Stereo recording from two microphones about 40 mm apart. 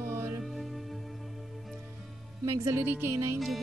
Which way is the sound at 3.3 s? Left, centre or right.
Centre.